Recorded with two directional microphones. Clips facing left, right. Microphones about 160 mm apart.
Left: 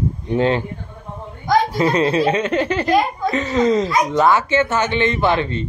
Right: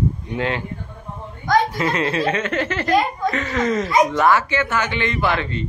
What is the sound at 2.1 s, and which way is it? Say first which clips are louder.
A man's voice: left 4 dB; 20° left (ahead or behind).